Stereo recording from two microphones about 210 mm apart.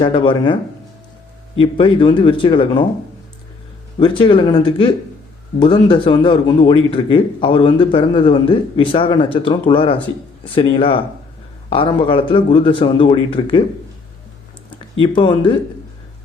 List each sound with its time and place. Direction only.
0.0 s a man's voice: 25° left (ahead or behind)
4.0 s a man's voice: 25° left (ahead or behind)
15.0 s a man's voice: 25° left (ahead or behind)